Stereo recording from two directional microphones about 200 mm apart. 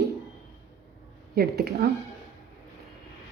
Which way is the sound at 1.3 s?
50° right (ahead or behind).